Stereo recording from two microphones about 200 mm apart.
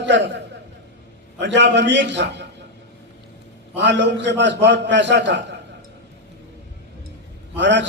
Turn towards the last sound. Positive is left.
turn(degrees=-60)  # may be behind; listen again after turning